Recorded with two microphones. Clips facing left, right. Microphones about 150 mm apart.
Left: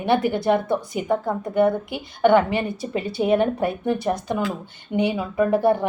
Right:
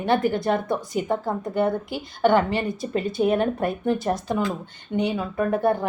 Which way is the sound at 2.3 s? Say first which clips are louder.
Left 2 dB; 25° left (ahead or behind).